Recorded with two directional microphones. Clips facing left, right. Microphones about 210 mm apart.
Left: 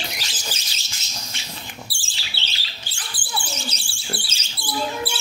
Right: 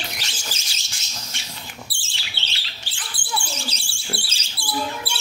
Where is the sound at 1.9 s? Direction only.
25° right (ahead or behind).